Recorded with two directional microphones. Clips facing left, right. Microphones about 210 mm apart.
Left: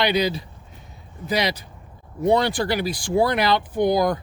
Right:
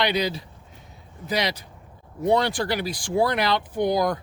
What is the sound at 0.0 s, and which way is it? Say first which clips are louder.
Speech: left 3 dB; 5° left (ahead or behind).